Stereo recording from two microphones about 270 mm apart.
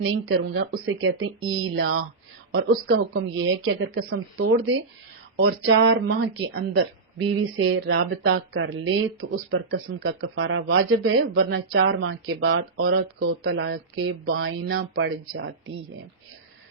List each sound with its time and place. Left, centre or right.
0.0 s speech: right